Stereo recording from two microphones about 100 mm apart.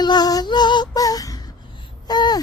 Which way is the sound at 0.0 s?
45° left (ahead or behind).